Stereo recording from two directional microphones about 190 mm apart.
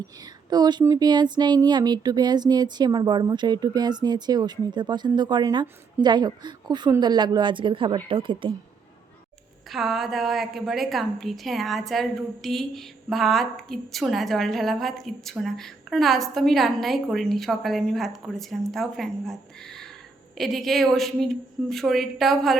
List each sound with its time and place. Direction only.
0.5 s speech: 20° right (ahead or behind)
9.6 s a woman's voice: centre (ahead or behind)